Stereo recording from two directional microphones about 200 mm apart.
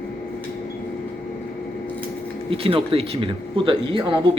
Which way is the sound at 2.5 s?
25° right (ahead or behind).